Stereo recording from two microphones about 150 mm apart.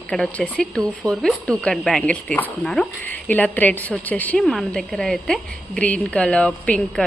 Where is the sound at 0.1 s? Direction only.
5° left (ahead or behind).